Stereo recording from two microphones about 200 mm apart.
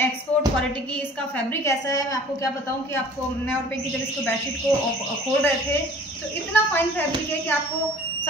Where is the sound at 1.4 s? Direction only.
15° left (ahead or behind).